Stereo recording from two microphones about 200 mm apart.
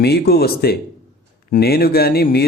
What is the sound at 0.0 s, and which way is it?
A man's voice, 50° left (ahead or behind).